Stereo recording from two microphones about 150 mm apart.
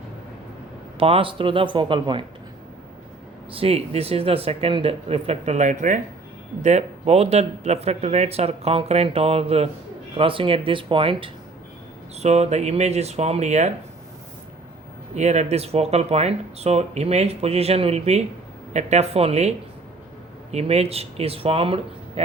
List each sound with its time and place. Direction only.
0.9 s speech: 40° right (ahead or behind)
3.5 s speech: 40° right (ahead or behind)
12.1 s speech: 45° right (ahead or behind)
15.1 s speech: 50° right (ahead or behind)